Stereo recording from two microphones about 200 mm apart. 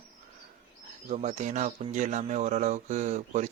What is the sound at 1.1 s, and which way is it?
Speech, 40° right (ahead or behind).